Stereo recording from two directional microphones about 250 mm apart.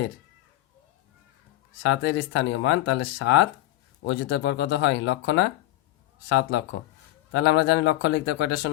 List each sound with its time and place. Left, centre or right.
1.8 s speech: left